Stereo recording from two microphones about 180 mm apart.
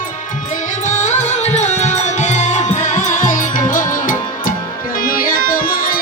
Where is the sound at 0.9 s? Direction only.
40° left (ahead or behind).